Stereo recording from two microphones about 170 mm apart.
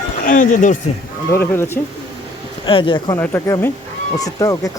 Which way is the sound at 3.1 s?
15° left (ahead or behind).